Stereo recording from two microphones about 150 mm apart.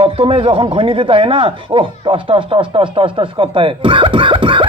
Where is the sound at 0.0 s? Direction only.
40° right (ahead or behind).